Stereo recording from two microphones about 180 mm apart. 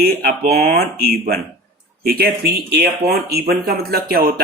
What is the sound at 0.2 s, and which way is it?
Speech, 55° right (ahead or behind).